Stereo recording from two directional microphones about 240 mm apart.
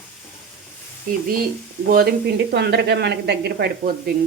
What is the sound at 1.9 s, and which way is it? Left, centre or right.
A woman's voice, right.